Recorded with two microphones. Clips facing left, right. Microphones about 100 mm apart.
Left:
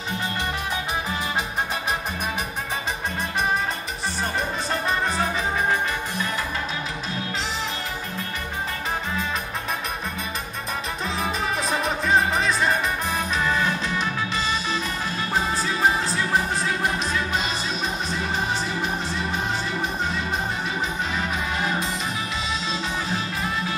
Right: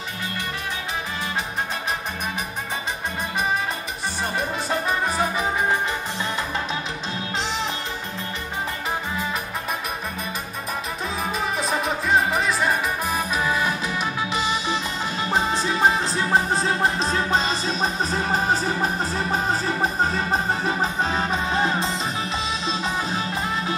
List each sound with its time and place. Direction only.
4.4 s music: 10° right (ahead or behind)
11.2 s music: centre (ahead or behind); by 23.5 s 30° right (ahead or behind)